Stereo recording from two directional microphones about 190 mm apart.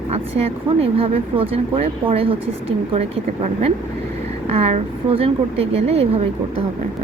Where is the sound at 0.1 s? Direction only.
30° right (ahead or behind).